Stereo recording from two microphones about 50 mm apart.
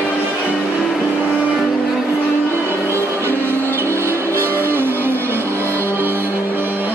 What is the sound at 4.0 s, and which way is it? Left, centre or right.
Music, right.